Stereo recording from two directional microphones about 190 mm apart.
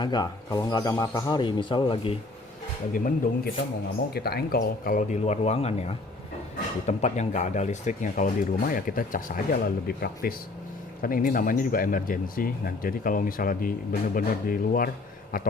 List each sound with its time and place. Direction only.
0.0 s a man's voice: 20° left (ahead or behind)
2.9 s speech: 45° left (ahead or behind)
4.1 s speech: 55° left (ahead or behind)